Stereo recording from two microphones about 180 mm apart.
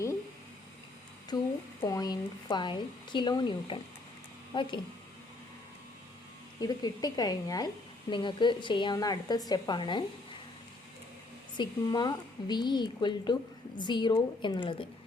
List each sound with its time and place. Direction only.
1.3 s speech: 20° left (ahead or behind)
6.6 s speech: 20° left (ahead or behind)
11.5 s speech: 25° left (ahead or behind)